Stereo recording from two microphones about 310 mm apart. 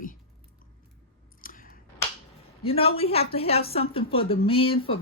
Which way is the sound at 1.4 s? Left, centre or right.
Left.